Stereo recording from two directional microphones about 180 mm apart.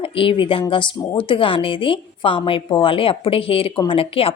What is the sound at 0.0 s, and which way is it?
A woman's voice, 30° left (ahead or behind).